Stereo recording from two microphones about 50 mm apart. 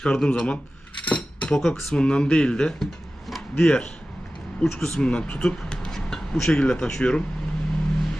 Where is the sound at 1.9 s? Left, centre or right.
Centre.